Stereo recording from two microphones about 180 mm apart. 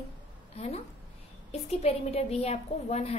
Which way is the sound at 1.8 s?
35° left (ahead or behind).